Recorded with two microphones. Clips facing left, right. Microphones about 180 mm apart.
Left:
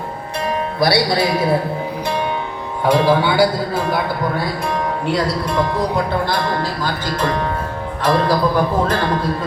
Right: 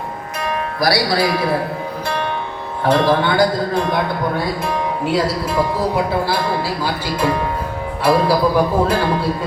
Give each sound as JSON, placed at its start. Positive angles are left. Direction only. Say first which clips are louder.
{"t": 0.8, "sound": "speech", "louder": "left 1 dB", "side_deg": 25}
{"t": 2.8, "sound": "speech", "louder": "left 1 dB", "side_deg": 10}